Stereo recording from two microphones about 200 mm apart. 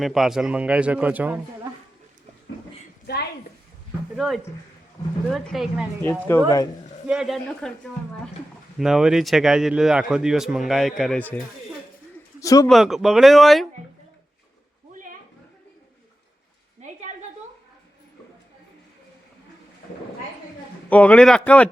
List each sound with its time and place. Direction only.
0.0 s a man's voice: centre (ahead or behind)
3.1 s a woman's voice: 55° left (ahead or behind)
4.2 s a man's voice: centre (ahead or behind)
6.3 s speech: 10° left (ahead or behind)
7.1 s a man's voice: centre (ahead or behind)
8.8 s a man's voice: centre (ahead or behind)
12.4 s speech: 15° left (ahead or behind)
12.6 s a man's voice: centre (ahead or behind)
20.9 s speech: 5° left (ahead or behind)